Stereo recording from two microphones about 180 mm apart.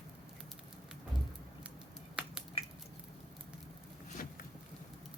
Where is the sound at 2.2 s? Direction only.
5° right (ahead or behind).